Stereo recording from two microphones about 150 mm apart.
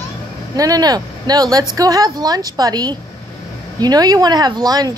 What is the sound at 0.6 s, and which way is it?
A woman's voice, 25° right (ahead or behind).